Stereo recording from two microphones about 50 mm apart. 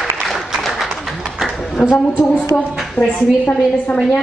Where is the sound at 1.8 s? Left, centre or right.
Left.